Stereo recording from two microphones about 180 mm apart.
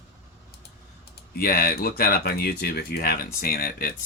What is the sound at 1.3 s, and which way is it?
Speech, 55° left (ahead or behind).